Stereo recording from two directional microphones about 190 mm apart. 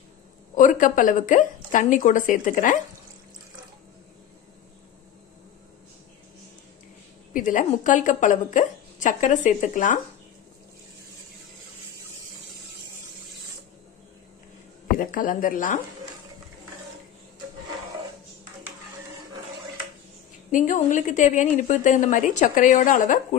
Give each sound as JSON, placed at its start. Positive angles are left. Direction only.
{"t": 0.6, "sound": "a woman's voice", "side_deg": 40}
{"t": 7.3, "sound": "a woman's voice", "side_deg": 45}
{"t": 15.0, "sound": "speech", "side_deg": 45}
{"t": 20.5, "sound": "a woman's voice", "side_deg": 40}